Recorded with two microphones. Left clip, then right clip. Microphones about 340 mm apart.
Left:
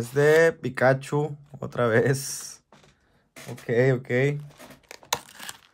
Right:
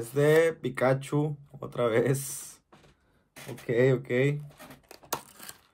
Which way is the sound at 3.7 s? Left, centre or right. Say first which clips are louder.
Left 2 dB; left.